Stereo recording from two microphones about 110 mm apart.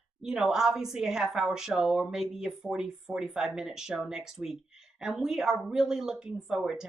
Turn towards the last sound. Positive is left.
turn(degrees=-5)  # may be behind; listen again after turning